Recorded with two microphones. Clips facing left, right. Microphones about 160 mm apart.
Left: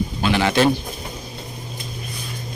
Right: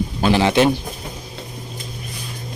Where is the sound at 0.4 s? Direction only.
20° right (ahead or behind).